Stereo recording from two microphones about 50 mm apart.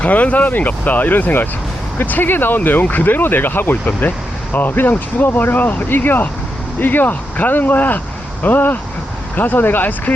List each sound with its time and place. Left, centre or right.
0.0 s speech: left